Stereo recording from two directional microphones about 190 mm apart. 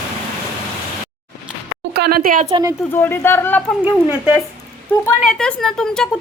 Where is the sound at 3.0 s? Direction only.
10° left (ahead or behind).